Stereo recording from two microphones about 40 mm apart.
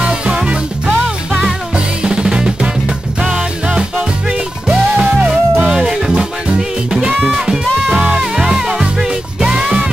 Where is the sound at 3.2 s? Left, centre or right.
Right.